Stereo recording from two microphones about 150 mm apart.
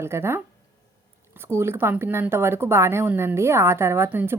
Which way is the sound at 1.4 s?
15° right (ahead or behind).